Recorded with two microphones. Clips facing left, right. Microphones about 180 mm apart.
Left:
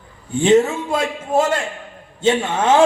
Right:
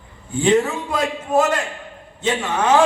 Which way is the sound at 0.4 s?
25° left (ahead or behind).